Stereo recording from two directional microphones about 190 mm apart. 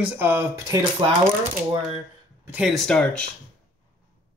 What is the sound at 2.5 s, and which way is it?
Speech, centre (ahead or behind).